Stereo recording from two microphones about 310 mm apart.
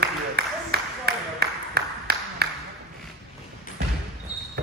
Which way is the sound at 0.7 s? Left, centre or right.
Right.